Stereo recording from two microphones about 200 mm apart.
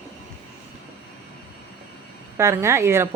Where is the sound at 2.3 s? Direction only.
15° right (ahead or behind).